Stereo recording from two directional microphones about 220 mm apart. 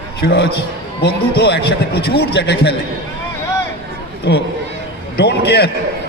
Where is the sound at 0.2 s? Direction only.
50° left (ahead or behind).